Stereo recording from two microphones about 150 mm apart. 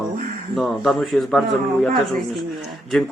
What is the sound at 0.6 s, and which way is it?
Speech, centre (ahead or behind).